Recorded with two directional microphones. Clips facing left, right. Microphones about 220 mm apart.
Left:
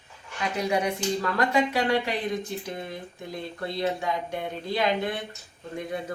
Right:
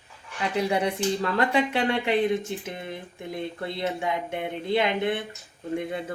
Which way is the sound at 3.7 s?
20° right (ahead or behind).